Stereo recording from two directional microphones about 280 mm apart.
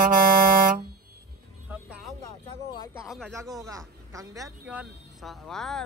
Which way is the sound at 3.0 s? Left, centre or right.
Centre.